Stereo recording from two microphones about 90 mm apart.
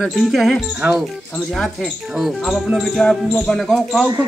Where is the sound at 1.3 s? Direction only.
5° left (ahead or behind).